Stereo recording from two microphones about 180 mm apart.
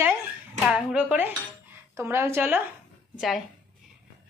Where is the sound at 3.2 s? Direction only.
Centre (ahead or behind).